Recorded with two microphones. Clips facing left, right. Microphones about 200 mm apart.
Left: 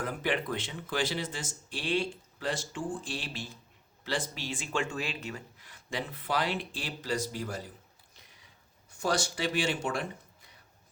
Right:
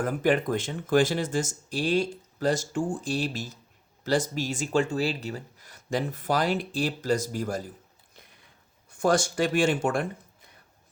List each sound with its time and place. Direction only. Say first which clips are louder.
0.0 s speech: right 8 dB; 45° right (ahead or behind)
8.9 s speech: right 7 dB; 50° right (ahead or behind)